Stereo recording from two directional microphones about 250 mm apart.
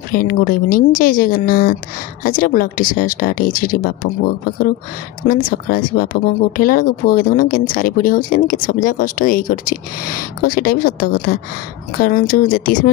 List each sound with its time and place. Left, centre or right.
0.1 s speech: left